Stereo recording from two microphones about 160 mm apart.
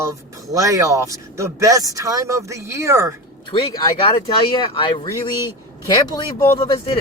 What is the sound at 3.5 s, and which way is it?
Speech, 30° left (ahead or behind).